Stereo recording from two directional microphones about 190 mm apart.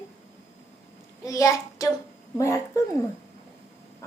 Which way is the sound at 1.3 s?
15° left (ahead or behind).